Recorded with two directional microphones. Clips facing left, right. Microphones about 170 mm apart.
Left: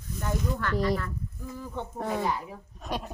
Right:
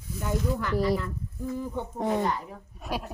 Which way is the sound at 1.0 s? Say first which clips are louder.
Right 4 dB; 20° right (ahead or behind).